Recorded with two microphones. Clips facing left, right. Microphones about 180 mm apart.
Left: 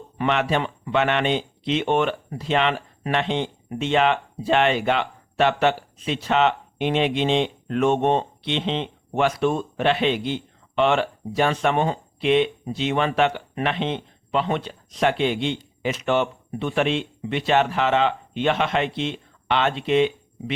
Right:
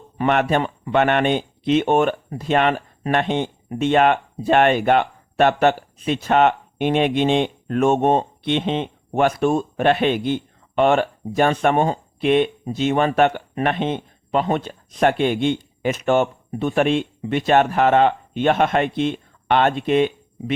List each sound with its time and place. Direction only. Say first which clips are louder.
0.2 s speech: right 3 dB; 50° right (ahead or behind)